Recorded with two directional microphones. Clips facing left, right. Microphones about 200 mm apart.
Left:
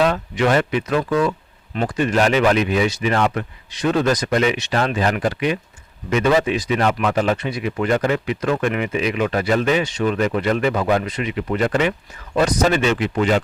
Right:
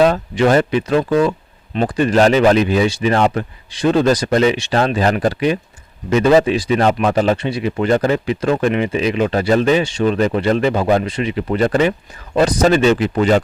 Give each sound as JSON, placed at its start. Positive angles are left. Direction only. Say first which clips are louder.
{"t": 0.0, "sound": "speech", "louder": "right 5 dB", "side_deg": -35}